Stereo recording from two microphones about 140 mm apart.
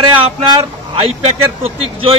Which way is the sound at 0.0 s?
40° right (ahead or behind).